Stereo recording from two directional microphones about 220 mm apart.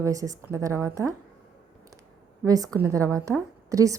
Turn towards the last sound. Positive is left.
turn(degrees=-15)  # may be behind; listen again after turning